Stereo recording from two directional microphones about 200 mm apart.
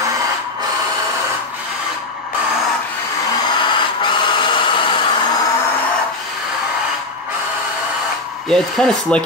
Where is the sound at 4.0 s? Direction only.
25° left (ahead or behind).